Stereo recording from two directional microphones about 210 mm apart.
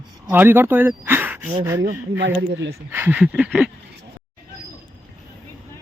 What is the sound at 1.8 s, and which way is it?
Speech, 55° right (ahead or behind).